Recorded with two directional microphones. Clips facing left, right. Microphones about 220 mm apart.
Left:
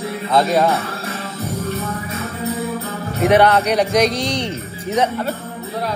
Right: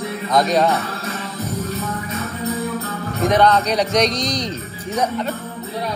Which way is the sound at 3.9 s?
30° left (ahead or behind).